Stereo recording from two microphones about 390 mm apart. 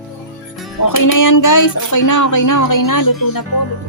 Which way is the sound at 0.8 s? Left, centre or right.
Left.